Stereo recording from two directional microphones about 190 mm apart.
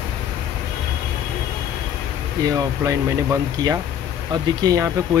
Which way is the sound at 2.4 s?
20° right (ahead or behind).